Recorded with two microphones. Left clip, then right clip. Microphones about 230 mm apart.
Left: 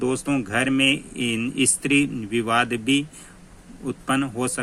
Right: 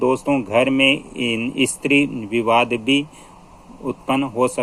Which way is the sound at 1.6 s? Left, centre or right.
Left.